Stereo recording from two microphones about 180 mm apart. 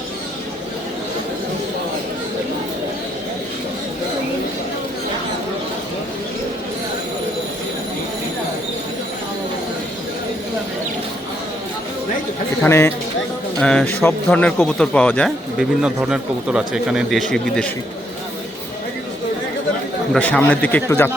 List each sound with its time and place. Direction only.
12.6 s a man's voice: 15° left (ahead or behind)
20.1 s a man's voice: 10° left (ahead or behind)